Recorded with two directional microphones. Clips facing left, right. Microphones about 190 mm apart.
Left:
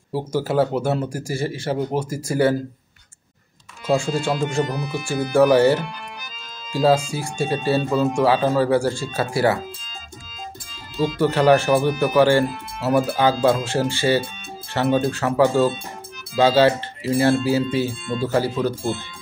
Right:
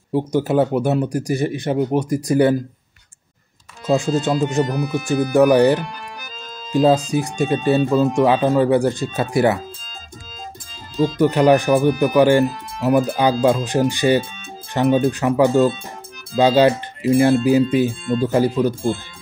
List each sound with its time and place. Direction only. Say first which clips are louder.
0.1 s speech: right 4 dB; 20° right (ahead or behind)
3.8 s speech: right 3 dB; 20° right (ahead or behind)
11.0 s speech: right 3 dB; 15° right (ahead or behind)